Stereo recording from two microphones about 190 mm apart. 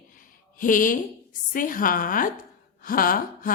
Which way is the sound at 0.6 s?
45° left (ahead or behind).